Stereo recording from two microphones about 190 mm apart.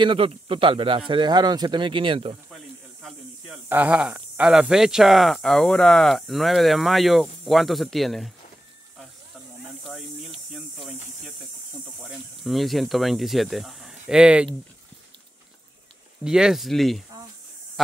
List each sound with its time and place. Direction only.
0.0 s speech: 25° right (ahead or behind)
2.5 s snake: centre (ahead or behind)
3.6 s speech: 10° right (ahead or behind)
9.8 s snake: centre (ahead or behind)
10.5 s hiss: centre (ahead or behind)
12.0 s speech: centre (ahead or behind)
16.3 s speech: 5° right (ahead or behind)